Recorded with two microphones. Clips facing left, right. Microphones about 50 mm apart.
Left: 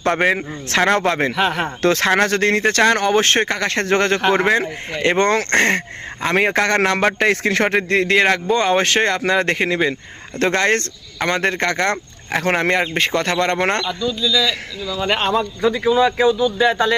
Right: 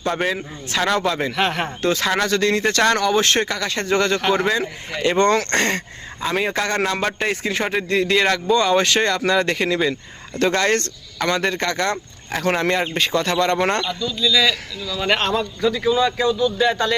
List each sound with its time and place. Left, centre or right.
0.0 s speech: left
0.8 s speech: left
1.3 s speech: centre
1.8 s speech: left
4.3 s a man's voice: left
6.2 s a man's voice: left
14.2 s a man's voice: centre
15.6 s a man's voice: centre